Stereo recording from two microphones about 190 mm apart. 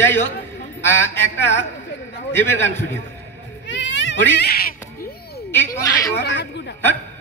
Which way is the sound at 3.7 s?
70° left (ahead or behind).